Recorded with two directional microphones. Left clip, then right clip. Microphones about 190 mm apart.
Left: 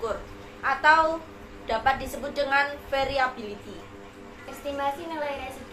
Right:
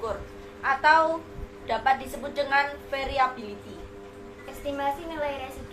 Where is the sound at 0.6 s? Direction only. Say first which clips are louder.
Even; 15° left (ahead or behind).